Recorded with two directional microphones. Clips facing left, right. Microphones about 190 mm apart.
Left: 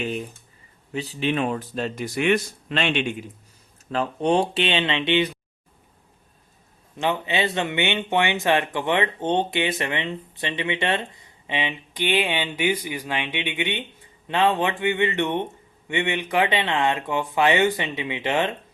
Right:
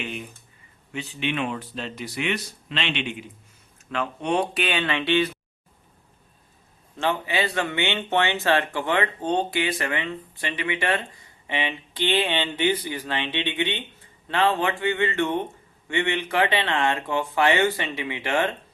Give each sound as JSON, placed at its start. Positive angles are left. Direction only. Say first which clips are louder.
{"t": 0.0, "sound": "speech", "louder": "left 5 dB", "side_deg": 35}
{"t": 3.8, "sound": "speech", "louder": "left 4 dB", "side_deg": 35}
{"t": 6.9, "sound": "speech", "louder": "left 1 dB", "side_deg": 15}